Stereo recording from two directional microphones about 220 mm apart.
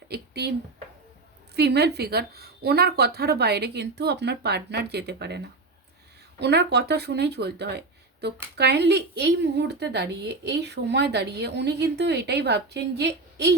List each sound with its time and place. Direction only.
0.1 s a sound: 50° right (ahead or behind)
1.5 s a woman's voice: 50° right (ahead or behind)
6.4 s a woman's voice: 50° right (ahead or behind)